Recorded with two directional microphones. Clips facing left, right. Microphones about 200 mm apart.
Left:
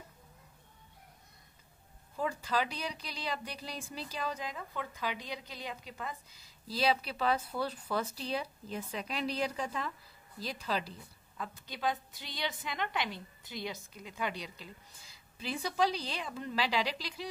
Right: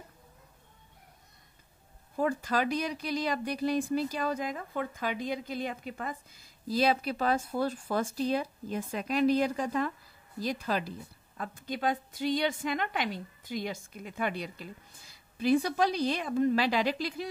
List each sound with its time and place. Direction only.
2.1 s speech: 50° right (ahead or behind)